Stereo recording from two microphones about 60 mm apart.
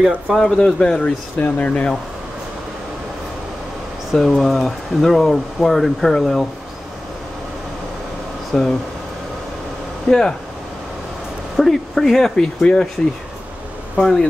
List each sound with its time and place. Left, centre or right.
0.3 s speech: centre
1.4 s speech: left
4.1 s speech: centre
8.5 s speech: centre
10.0 s speech: centre
11.5 s speech: centre
13.9 s speech: centre